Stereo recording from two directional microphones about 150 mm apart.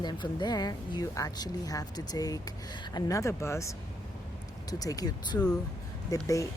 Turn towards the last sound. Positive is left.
turn(degrees=20)  # may be behind; listen again after turning